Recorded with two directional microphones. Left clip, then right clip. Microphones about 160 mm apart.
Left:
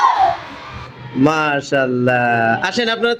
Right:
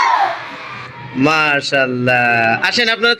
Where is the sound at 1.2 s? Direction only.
25° left (ahead or behind).